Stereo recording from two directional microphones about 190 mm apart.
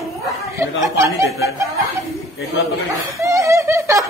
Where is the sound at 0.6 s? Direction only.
15° right (ahead or behind).